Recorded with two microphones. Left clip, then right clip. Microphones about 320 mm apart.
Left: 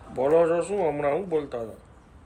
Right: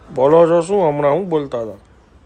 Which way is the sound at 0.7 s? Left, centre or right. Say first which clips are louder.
Right 10 dB; right.